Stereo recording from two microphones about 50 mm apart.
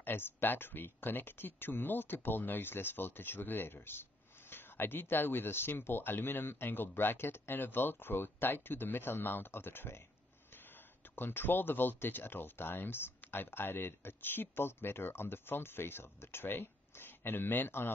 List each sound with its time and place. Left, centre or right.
0.0 s speech: left
11.1 s speech: left